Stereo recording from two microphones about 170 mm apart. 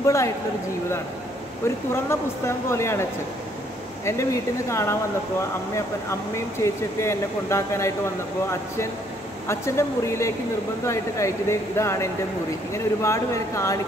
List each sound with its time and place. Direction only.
0.0 s speech: 15° left (ahead or behind)
1.9 s speech: 15° left (ahead or behind)